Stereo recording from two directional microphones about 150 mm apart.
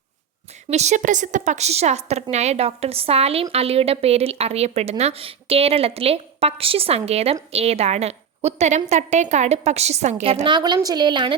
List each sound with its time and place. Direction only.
0.7 s a woman's voice: 50° right (ahead or behind)
10.4 s a woman's voice: 30° right (ahead or behind)